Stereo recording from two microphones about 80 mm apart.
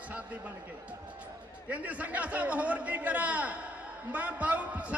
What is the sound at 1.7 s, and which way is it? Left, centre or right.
A man's voice, centre.